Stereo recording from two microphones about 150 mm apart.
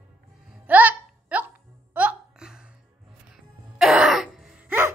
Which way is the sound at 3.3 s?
Centre (ahead or behind).